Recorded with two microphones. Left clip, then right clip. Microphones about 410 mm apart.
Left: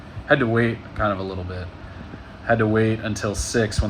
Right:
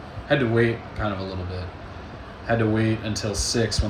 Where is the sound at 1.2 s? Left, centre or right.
Centre.